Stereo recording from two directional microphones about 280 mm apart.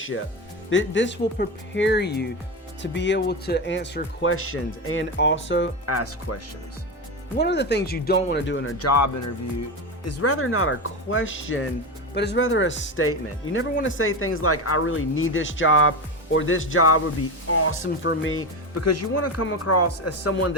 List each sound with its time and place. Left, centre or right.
0.7 s speech: left
5.8 s speech: left
7.3 s speech: left
10.1 s speech: left